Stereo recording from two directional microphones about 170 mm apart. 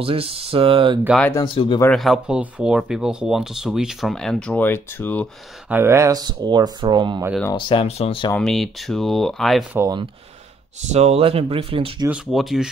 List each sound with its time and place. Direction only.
0.0 s speech: 35° right (ahead or behind)
1.3 s speech: 30° left (ahead or behind)
2.0 s speech: 5° right (ahead or behind)
5.7 s speech: 15° right (ahead or behind)
7.5 s speech: 30° left (ahead or behind)
8.4 s speech: centre (ahead or behind)
9.8 s speech: 20° right (ahead or behind)
10.9 s speech: 40° right (ahead or behind)
12.1 s speech: centre (ahead or behind)